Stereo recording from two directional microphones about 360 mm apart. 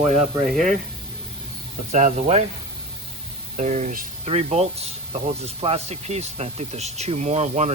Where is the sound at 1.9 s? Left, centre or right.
Centre.